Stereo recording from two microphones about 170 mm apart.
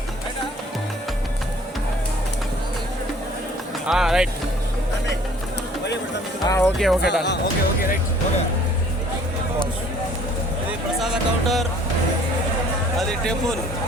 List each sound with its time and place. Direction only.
3.8 s speech: 5° right (ahead or behind)
6.4 s speech: 20° left (ahead or behind)
6.7 s speech: centre (ahead or behind)
7.0 s speech: 85° left
10.7 s speech: 5° right (ahead or behind)
13.0 s speech: 5° left (ahead or behind)